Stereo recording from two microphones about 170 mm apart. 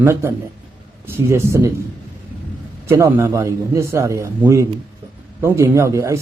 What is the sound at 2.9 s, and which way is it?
A man's voice, 15° right (ahead or behind).